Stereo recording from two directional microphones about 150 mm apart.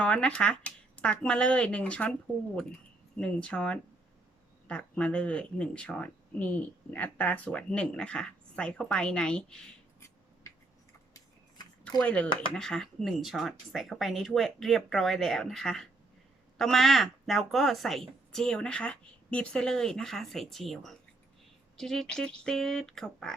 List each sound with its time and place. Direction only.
0.0 s speech: 5° left (ahead or behind)
3.2 s speech: 5° left (ahead or behind)
10.5 s tick-tock: 20° left (ahead or behind)
11.9 s a woman's voice: 10° left (ahead or behind)